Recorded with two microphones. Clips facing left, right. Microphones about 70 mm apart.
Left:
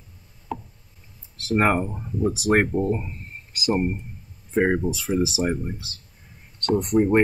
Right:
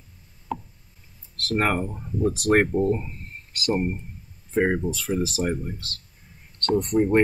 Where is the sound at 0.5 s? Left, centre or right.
Centre.